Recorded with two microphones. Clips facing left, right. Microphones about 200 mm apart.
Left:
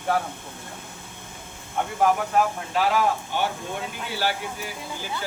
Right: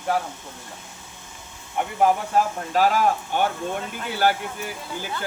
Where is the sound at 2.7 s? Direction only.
45° right (ahead or behind).